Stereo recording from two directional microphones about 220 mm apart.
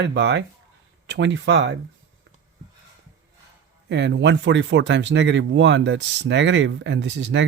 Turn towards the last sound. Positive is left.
turn(degrees=-55)  # may be behind; listen again after turning